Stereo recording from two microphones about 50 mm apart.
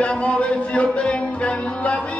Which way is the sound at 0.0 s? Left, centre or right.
Left.